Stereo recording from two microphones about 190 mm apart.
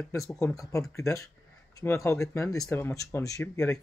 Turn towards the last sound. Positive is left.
turn(degrees=15)  # may be behind; listen again after turning